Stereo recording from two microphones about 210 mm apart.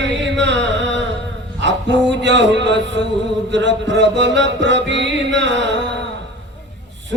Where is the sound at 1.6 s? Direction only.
55° right (ahead or behind).